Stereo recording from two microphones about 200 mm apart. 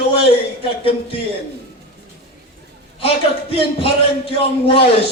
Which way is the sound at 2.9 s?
25° left (ahead or behind).